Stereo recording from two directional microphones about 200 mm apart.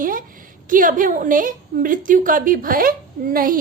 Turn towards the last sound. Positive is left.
turn(degrees=-45)  # may be behind; listen again after turning